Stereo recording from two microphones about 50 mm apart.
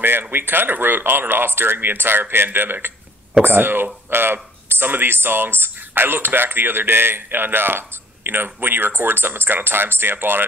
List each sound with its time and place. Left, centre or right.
0.0 s speech: right